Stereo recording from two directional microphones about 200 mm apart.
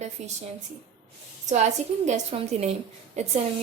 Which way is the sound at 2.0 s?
35° right (ahead or behind).